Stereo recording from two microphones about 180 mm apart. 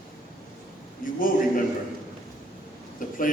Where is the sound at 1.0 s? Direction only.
50° left (ahead or behind).